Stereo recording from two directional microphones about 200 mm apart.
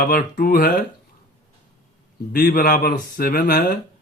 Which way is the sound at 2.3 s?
45° left (ahead or behind).